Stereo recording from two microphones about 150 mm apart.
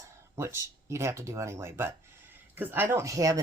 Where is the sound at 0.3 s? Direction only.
20° right (ahead or behind).